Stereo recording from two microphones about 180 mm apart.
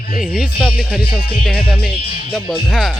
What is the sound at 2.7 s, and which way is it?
Music, centre (ahead or behind).